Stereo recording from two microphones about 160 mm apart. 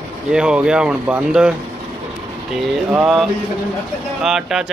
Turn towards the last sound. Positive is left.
turn(degrees=-5)  # may be behind; listen again after turning